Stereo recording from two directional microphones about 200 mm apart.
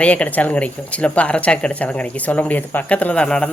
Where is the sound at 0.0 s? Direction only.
5° left (ahead or behind).